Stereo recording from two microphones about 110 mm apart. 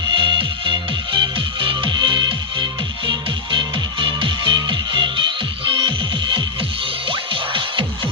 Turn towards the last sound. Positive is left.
turn(degrees=-50)  # may be behind; listen again after turning